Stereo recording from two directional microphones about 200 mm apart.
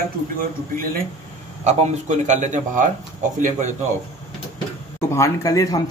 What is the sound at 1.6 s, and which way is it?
A man's voice, 35° right (ahead or behind).